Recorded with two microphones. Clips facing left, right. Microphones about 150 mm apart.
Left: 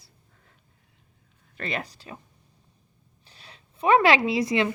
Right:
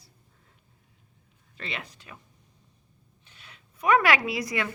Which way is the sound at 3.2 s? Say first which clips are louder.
Left 3 dB; 35° left (ahead or behind).